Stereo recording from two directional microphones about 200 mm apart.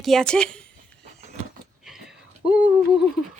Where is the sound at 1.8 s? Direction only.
5° right (ahead or behind).